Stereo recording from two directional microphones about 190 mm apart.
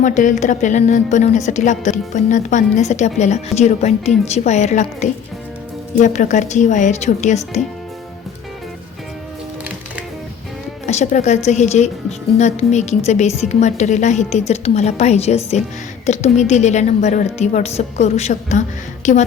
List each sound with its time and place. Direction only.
0.0 s a woman's voice: 40° left (ahead or behind)
10.8 s a woman's voice: 40° left (ahead or behind)